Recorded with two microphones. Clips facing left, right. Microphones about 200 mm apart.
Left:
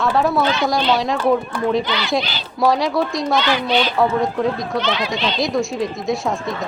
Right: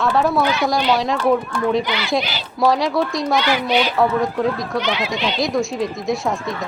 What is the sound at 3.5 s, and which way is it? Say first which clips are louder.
Speech: even; 10° right (ahead or behind).